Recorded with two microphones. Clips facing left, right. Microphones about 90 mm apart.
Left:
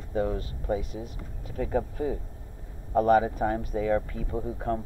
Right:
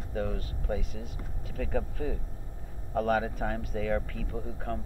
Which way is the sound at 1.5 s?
15° left (ahead or behind).